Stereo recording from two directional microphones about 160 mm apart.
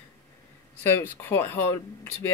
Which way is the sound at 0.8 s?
10° left (ahead or behind).